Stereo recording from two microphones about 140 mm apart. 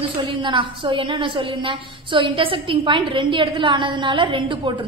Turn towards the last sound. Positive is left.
turn(degrees=-35)  # may be behind; listen again after turning